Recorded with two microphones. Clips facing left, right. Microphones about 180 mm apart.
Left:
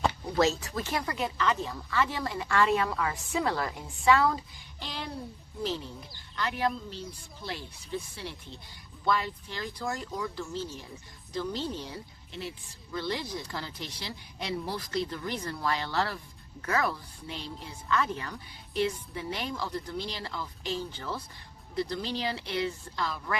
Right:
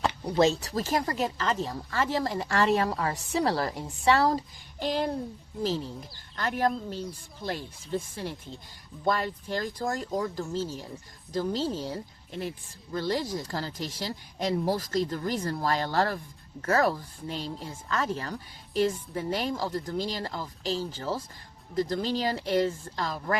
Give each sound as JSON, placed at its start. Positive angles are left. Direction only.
{"t": 0.3, "sound": "speech", "side_deg": -30}